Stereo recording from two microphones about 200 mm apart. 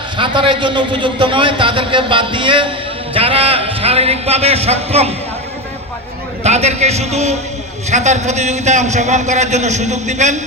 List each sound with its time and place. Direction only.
0.2 s a man's voice: 25° right (ahead or behind)
6.4 s a man's voice: 35° right (ahead or behind)